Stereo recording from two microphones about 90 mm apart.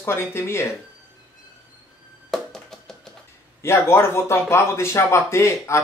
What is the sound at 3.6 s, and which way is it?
Speech, 30° left (ahead or behind).